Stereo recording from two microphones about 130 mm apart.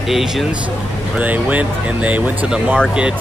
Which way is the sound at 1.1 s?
10° right (ahead or behind).